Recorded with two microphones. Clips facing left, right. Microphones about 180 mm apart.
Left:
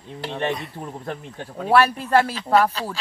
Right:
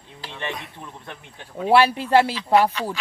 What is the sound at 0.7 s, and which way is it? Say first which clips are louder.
Speech: left 7 dB; 40° left (ahead or behind).